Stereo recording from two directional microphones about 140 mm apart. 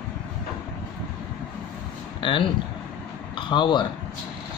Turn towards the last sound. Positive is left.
turn(degrees=35)  # may be behind; listen again after turning